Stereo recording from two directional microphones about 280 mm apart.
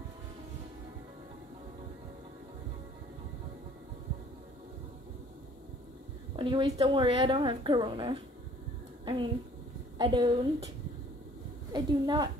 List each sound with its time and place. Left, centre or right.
6.3 s a woman's voice: centre
11.7 s a woman's voice: centre